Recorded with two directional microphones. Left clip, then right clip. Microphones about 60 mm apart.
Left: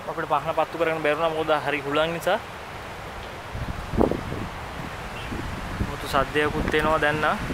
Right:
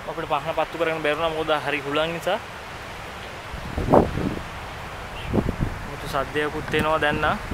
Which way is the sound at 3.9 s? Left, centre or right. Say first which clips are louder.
Right 7 dB; right.